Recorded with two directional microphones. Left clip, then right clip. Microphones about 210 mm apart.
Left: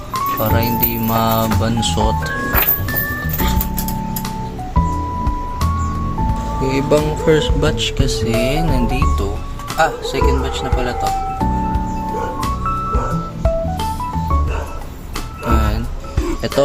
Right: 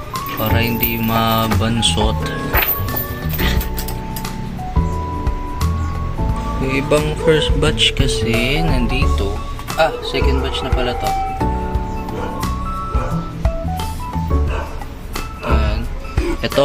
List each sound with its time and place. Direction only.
0.3 s music: 10° left (ahead or behind)
6.7 s speech: 10° left (ahead or behind)